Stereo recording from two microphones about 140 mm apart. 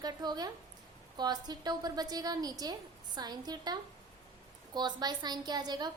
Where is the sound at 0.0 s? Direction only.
30° right (ahead or behind).